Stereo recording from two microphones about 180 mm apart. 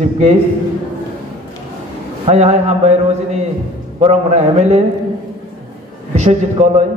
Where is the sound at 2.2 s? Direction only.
35° right (ahead or behind).